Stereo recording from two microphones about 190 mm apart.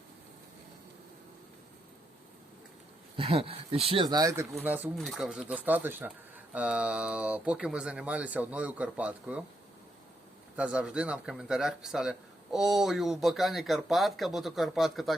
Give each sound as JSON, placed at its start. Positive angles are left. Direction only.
{"t": 3.2, "sound": "speech", "side_deg": -30}
{"t": 10.6, "sound": "speech", "side_deg": -5}